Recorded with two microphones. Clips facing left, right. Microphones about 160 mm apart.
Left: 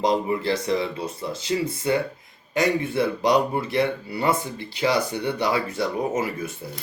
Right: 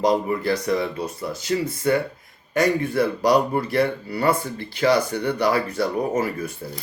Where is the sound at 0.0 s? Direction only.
25° left (ahead or behind).